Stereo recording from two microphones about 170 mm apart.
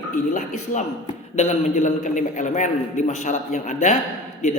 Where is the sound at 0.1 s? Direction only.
45° left (ahead or behind).